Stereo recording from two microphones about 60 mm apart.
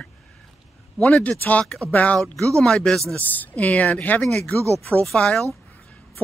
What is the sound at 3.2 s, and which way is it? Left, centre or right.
Speech, left.